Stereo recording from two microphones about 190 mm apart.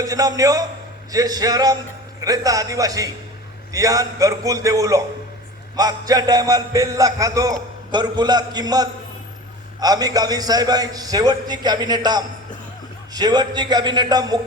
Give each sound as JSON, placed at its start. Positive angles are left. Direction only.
{"t": 0.0, "sound": "a man's voice", "side_deg": -20}